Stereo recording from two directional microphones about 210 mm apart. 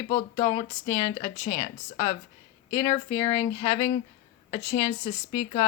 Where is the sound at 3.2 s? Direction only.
20° left (ahead or behind).